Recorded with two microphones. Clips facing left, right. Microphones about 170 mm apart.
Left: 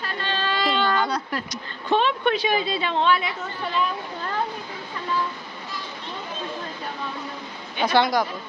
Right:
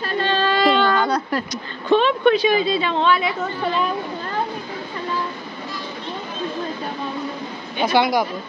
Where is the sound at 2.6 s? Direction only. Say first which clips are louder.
Right 3 dB; 90° right.